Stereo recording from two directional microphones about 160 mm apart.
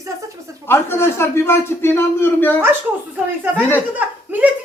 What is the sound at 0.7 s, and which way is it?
Speech, 15° left (ahead or behind).